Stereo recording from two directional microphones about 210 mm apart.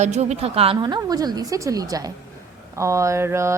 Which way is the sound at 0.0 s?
35° right (ahead or behind).